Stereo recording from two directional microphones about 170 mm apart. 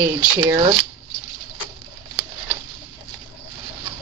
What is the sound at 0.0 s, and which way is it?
Speech, 20° right (ahead or behind).